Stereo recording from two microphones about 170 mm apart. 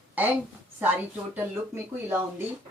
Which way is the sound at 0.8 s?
10° right (ahead or behind).